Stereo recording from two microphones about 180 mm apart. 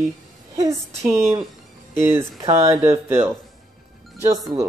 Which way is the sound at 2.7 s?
15° right (ahead or behind).